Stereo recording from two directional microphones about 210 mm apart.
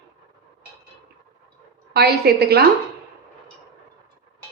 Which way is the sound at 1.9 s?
50° right (ahead or behind).